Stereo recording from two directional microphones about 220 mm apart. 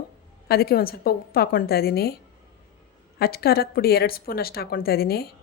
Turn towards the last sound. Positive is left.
turn(degrees=45)  # may be behind; listen again after turning